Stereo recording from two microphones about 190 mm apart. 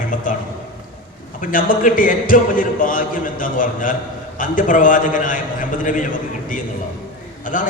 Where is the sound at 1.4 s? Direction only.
45° left (ahead or behind).